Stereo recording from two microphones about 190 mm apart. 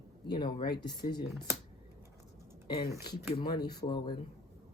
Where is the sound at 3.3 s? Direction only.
20° left (ahead or behind).